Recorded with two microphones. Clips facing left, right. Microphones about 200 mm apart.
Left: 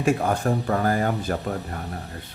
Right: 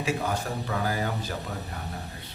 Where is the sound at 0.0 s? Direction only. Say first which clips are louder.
Left 7 dB; 50° left (ahead or behind).